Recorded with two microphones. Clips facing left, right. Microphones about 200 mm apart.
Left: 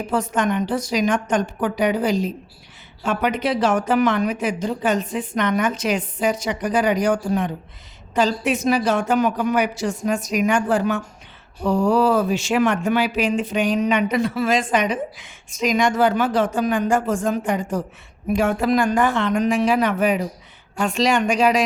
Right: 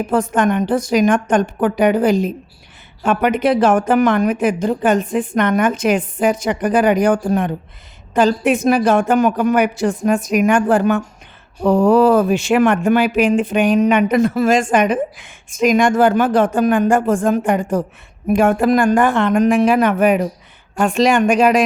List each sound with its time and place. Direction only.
0.1 s speech: 50° right (ahead or behind)